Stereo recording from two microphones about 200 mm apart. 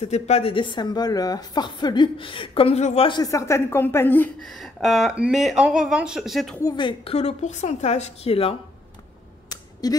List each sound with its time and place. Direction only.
0.0 s a woman's voice: 30° left (ahead or behind); by 6.6 s centre (ahead or behind)
6.6 s a woman's voice: 25° left (ahead or behind)
9.5 s a sound: 20° left (ahead or behind)